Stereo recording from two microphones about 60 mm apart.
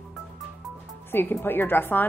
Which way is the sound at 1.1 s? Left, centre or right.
Left.